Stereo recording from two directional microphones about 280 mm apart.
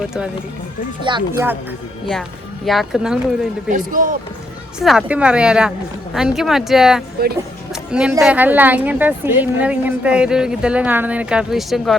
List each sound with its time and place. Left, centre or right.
0.0 s a woman's voice: centre
1.0 s speech: centre
2.6 s a woman's voice: centre
3.7 s speech: right
4.8 s a woman's voice: centre